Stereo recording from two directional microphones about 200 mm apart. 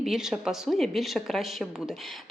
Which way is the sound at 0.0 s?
Centre (ahead or behind).